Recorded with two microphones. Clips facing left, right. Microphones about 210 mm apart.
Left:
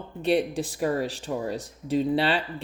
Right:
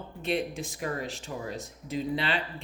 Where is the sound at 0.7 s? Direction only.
35° left (ahead or behind).